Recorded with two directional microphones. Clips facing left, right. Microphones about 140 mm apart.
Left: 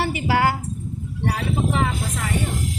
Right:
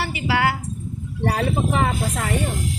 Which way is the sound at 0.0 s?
40° left (ahead or behind).